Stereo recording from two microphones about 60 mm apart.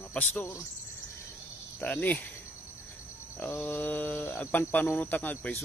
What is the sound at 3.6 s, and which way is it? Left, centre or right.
Speech, left.